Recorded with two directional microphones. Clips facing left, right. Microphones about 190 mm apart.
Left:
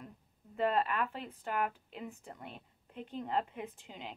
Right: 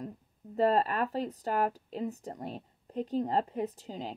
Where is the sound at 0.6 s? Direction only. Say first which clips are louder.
Right 5 dB; 40° right (ahead or behind).